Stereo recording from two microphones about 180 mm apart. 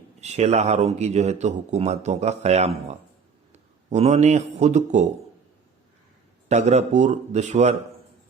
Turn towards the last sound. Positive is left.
turn(degrees=-40)  # may be behind; listen again after turning